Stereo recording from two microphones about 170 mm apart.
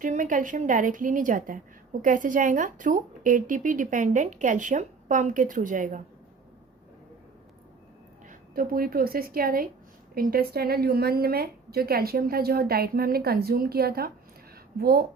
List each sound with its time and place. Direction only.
0.0 s a woman's voice: 50° right (ahead or behind)
8.3 s a woman's voice: 60° right (ahead or behind)